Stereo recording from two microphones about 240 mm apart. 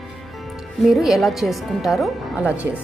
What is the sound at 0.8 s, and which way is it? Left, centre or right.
A woman's voice, centre.